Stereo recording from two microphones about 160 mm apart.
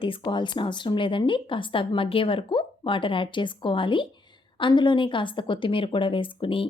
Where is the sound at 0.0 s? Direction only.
30° left (ahead or behind).